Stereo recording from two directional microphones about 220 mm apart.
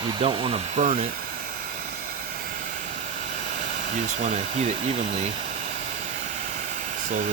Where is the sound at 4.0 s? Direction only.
35° right (ahead or behind).